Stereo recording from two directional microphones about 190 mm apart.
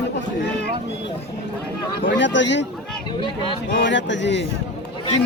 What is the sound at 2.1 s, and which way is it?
Speech, 70° left (ahead or behind).